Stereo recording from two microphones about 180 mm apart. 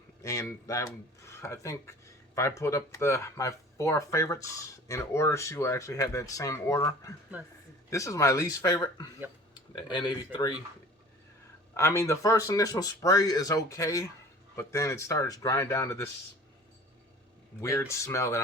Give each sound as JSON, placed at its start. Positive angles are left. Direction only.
{"t": 0.2, "sound": "speech", "side_deg": 15}
{"t": 11.7, "sound": "speech", "side_deg": 15}
{"t": 17.6, "sound": "speech", "side_deg": 15}